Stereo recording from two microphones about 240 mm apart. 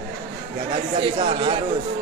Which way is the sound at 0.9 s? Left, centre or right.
Right.